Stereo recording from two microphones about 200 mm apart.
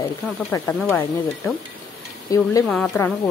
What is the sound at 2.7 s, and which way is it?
Speech, 5° left (ahead or behind).